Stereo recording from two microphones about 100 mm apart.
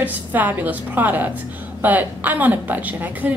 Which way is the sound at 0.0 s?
15° right (ahead or behind).